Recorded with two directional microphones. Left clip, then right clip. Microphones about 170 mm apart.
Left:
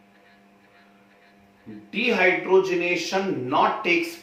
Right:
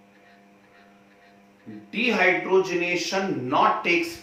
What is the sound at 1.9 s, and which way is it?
Speech, 10° left (ahead or behind).